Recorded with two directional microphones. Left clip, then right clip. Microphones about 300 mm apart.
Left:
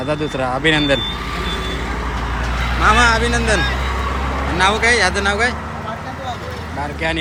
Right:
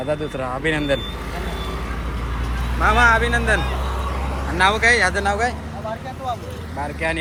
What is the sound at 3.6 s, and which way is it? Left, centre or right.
Vehicle, left.